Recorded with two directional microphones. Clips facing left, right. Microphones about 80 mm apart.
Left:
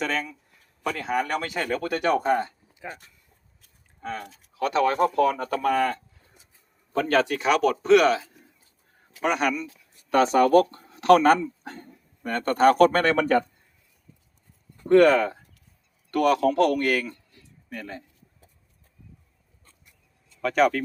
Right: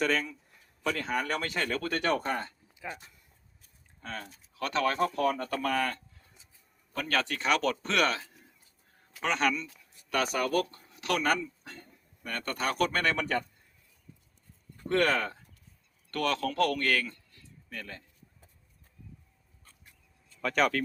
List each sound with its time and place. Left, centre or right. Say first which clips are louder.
0.0 s speech: left 1 dB; centre
4.6 s speech: left 7 dB; centre
7.3 s speech: left 6 dB; centre
10.1 s speech: left 11 dB; left
15.1 s a man's voice: left 8 dB; centre
20.4 s speech: left 6 dB; centre